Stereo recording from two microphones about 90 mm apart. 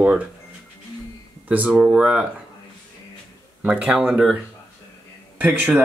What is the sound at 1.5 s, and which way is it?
Speech, 15° right (ahead or behind).